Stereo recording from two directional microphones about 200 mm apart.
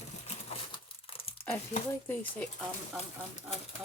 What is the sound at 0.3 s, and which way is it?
Crumpling, 30° left (ahead or behind).